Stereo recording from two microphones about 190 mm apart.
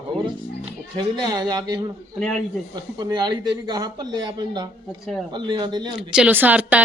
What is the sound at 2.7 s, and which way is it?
Speech, 20° right (ahead or behind).